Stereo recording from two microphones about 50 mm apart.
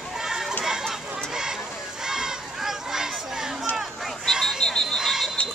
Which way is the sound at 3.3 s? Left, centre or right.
Centre.